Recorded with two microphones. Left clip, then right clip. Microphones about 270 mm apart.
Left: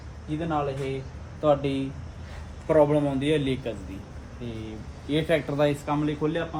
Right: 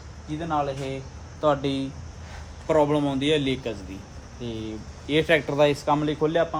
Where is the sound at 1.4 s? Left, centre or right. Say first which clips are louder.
Even; right.